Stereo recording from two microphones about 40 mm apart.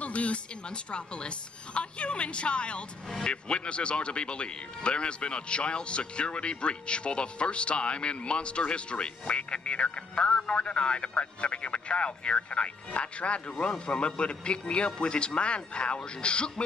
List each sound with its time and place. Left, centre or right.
0.0 s speech: left